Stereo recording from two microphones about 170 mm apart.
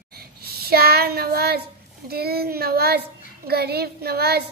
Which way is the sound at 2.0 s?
65° right (ahead or behind).